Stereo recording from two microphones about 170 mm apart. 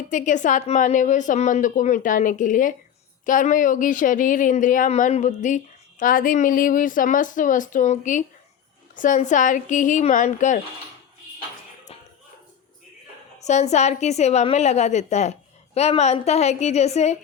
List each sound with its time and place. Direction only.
0.1 s speech: 50° left (ahead or behind)
13.4 s a woman's voice: 45° left (ahead or behind)